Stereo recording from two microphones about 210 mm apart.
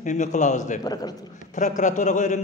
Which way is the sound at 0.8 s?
20° left (ahead or behind).